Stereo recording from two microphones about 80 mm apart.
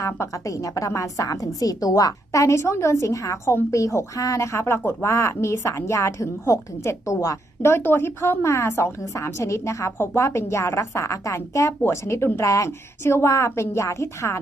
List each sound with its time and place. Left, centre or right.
0.0 s a woman's voice: left